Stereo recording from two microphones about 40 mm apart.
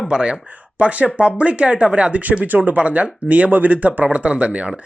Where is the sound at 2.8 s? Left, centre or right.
Right.